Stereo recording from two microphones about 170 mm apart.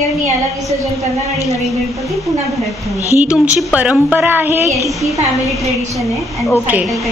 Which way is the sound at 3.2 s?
10° right (ahead or behind).